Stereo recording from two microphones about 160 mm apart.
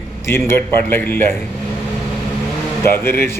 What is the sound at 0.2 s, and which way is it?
A man's voice, 15° left (ahead or behind).